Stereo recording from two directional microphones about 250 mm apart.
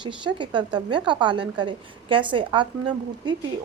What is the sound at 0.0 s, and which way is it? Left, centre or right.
A woman's voice, centre.